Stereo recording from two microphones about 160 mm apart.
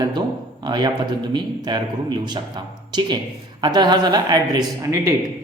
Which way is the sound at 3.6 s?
25° right (ahead or behind).